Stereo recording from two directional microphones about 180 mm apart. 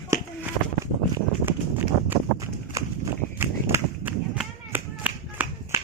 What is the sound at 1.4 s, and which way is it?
Horse, 10° right (ahead or behind).